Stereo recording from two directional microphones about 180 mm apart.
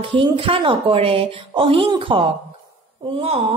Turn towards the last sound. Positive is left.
turn(degrees=-30)  # may be behind; listen again after turning